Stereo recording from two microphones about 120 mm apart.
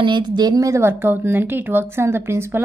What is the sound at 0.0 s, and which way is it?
Speech, 35° right (ahead or behind).